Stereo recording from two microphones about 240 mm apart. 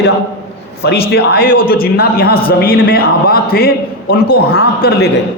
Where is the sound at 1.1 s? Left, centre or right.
Left.